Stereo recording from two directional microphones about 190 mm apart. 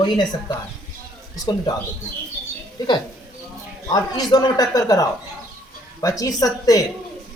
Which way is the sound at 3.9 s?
20° left (ahead or behind).